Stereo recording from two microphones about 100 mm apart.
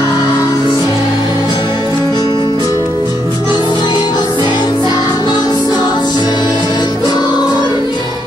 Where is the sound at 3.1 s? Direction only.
45° left (ahead or behind).